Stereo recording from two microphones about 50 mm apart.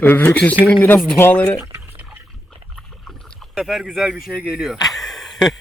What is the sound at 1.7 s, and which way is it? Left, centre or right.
Drip, right.